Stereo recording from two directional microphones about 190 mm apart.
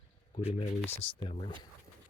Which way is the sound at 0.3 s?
30° left (ahead or behind).